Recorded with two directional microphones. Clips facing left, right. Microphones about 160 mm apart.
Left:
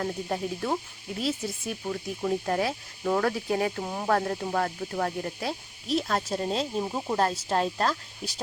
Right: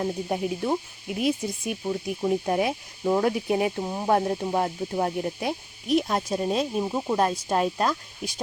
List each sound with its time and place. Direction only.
0.0 s speech: 15° right (ahead or behind)
6.8 s cricket: centre (ahead or behind)
7.2 s speech: 15° right (ahead or behind)